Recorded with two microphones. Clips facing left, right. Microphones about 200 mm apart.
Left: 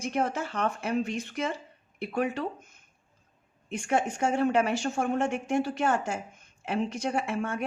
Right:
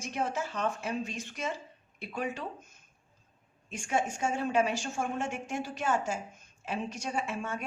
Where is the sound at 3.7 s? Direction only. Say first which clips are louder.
Left 4 dB; 60° left (ahead or behind).